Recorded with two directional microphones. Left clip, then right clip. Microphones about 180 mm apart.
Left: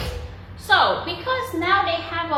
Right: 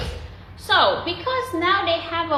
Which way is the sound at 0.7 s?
55° right (ahead or behind).